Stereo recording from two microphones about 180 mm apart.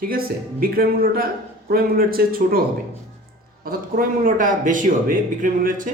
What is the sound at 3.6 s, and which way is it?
A man's voice, 55° right (ahead or behind).